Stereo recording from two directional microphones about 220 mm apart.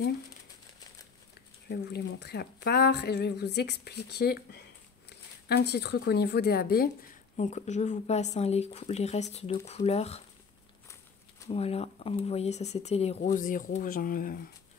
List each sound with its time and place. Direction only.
1.7 s speech: 45° left (ahead or behind); by 10.2 s 30° left (ahead or behind)
11.4 s speech: 30° left (ahead or behind)